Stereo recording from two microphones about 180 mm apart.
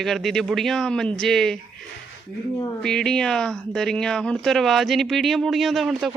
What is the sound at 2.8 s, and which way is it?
Speech, 5° left (ahead or behind).